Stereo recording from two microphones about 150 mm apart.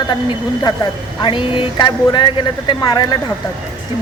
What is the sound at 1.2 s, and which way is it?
Speech, 35° left (ahead or behind).